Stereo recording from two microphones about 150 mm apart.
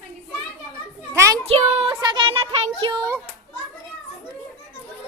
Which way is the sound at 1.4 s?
40° right (ahead or behind).